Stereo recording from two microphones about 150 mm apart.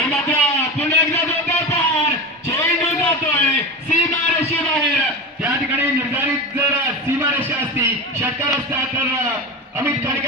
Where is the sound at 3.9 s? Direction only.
50° left (ahead or behind).